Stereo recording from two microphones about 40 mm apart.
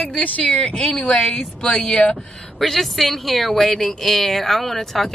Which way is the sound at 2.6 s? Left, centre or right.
Centre.